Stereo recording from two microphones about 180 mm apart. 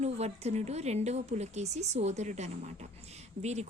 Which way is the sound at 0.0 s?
35° right (ahead or behind).